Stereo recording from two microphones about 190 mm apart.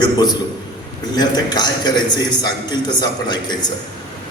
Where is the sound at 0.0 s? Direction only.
20° left (ahead or behind).